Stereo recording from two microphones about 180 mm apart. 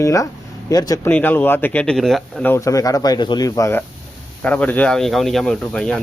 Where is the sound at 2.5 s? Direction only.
15° left (ahead or behind).